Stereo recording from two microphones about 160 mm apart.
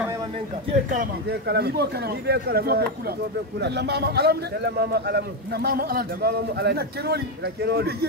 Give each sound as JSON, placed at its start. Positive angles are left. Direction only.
{"t": 0.8, "sound": "a man's voice", "side_deg": -75}
{"t": 3.6, "sound": "a man's voice", "side_deg": -90}